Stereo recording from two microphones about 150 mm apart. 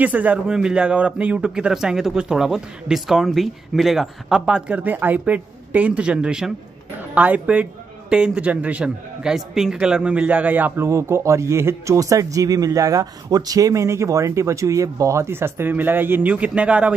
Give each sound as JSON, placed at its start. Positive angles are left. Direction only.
{"t": 0.0, "sound": "a man's voice", "side_deg": -10}